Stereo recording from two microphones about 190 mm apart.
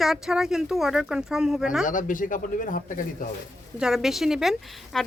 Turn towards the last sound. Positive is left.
turn(degrees=0)  # may be behind; listen again after turning